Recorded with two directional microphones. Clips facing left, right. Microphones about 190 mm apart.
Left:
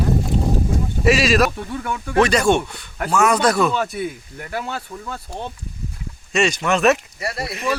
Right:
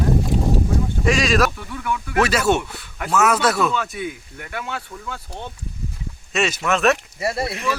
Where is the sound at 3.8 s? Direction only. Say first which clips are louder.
Left 3 dB; 40° left (ahead or behind).